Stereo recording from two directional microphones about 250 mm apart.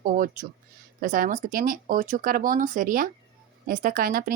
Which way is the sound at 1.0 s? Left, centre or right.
Right.